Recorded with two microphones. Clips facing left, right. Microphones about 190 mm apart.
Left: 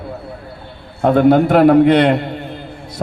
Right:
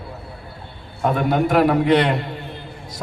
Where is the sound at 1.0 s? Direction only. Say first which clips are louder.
Left 8 dB; 65° left (ahead or behind).